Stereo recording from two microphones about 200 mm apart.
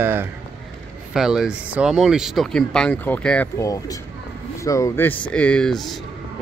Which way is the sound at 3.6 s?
15° left (ahead or behind).